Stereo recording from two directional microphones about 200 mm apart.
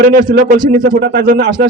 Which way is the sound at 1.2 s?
40° right (ahead or behind).